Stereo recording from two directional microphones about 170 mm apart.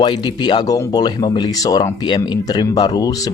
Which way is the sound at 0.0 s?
25° left (ahead or behind).